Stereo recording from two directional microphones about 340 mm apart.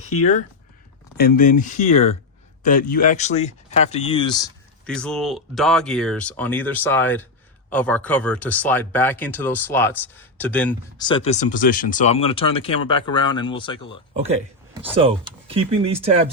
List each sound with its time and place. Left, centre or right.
0.1 s speech: left
1.1 s speech: left
4.9 s speech: centre
14.1 s speech: centre